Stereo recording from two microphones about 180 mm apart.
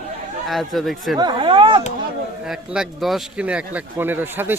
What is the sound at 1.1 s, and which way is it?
Speech, 25° right (ahead or behind).